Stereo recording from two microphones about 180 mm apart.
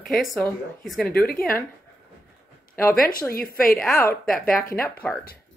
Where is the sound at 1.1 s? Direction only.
55° left (ahead or behind).